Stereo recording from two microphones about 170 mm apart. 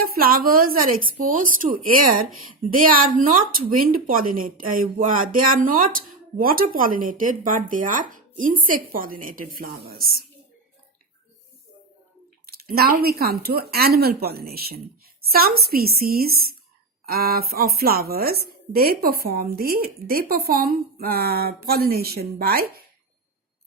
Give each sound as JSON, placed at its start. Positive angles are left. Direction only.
{"t": 0.0, "sound": "a woman's voice", "side_deg": -60}
{"t": 12.5, "sound": "a woman's voice", "side_deg": -65}